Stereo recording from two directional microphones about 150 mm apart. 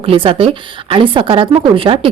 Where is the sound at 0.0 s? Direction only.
35° right (ahead or behind).